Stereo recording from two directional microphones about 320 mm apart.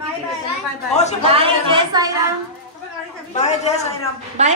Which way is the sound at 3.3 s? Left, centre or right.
Left.